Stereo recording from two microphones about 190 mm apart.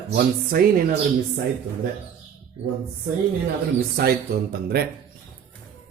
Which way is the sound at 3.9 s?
55° right (ahead or behind).